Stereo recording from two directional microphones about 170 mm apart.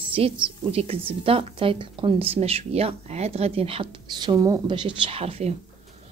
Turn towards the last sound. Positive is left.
turn(degrees=-35)  # may be behind; listen again after turning